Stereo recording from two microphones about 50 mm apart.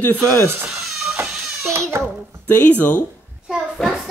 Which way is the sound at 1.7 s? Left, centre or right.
Right.